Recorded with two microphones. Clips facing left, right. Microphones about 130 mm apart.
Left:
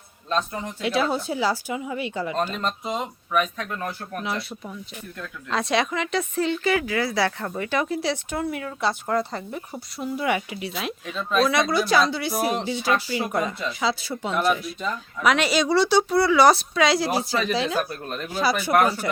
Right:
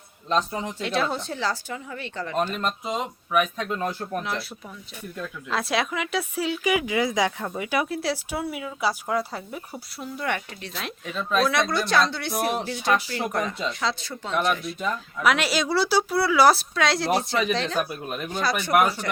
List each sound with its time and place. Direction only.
0.3 s speech: 20° right (ahead or behind)
0.8 s speech: 5° left (ahead or behind)
2.5 s speech: 5° right (ahead or behind)
3.6 s speech: 20° right (ahead or behind)
4.2 s speech: centre (ahead or behind)
17.7 s speech: 10° right (ahead or behind)
18.3 s speech: 5° left (ahead or behind)
18.7 s speech: 10° right (ahead or behind)